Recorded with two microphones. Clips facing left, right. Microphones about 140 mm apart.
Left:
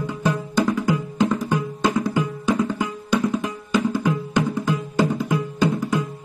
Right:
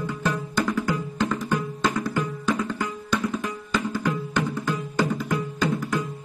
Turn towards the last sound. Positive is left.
turn(degrees=15)  # may be behind; listen again after turning